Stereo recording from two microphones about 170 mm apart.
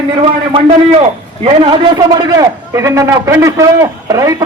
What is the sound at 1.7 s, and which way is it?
A man's voice, 25° right (ahead or behind).